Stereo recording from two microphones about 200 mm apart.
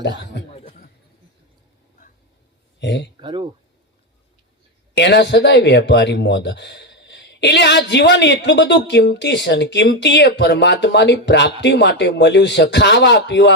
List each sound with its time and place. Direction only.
0.5 s chuckle: 30° left (ahead or behind)
2.8 s speech: 60° left (ahead or behind)
3.2 s speech: 25° right (ahead or behind)
4.9 s speech: 60° left (ahead or behind)